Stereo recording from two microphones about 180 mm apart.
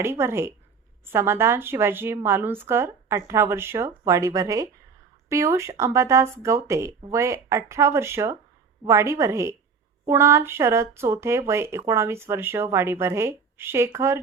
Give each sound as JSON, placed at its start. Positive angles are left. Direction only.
{"t": 0.0, "sound": "speech", "side_deg": -15}